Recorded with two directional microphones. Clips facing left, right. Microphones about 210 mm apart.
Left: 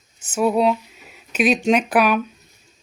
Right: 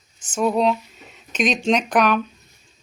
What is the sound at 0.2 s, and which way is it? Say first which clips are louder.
Speech: left 2 dB; 10° left (ahead or behind).